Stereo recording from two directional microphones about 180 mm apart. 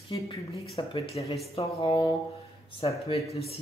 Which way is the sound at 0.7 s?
30° left (ahead or behind).